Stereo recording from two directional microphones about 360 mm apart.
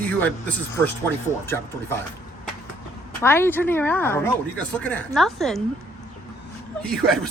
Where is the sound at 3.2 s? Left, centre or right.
Centre.